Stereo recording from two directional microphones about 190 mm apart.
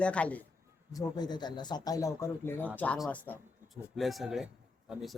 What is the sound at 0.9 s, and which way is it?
Speech, 20° left (ahead or behind).